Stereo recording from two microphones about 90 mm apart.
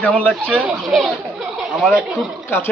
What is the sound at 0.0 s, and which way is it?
Speech, 10° left (ahead or behind).